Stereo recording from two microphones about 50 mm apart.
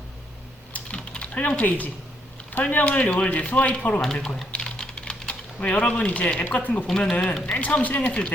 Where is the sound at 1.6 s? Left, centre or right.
Left.